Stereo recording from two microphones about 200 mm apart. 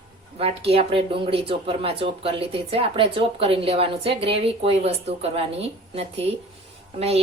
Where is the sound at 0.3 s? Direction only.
30° right (ahead or behind).